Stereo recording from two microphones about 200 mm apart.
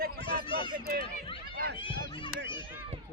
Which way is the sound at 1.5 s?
45° right (ahead or behind).